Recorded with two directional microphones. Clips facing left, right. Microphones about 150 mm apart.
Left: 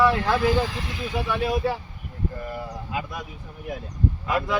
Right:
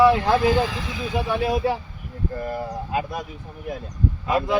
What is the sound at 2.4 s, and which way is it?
Speech, 40° right (ahead or behind).